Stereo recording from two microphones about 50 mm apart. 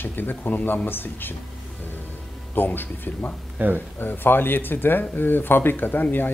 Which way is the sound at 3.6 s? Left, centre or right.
Right.